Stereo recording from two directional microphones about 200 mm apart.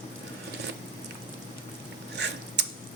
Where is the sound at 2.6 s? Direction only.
60° right (ahead or behind).